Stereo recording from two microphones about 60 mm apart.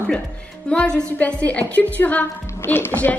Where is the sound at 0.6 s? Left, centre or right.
Centre.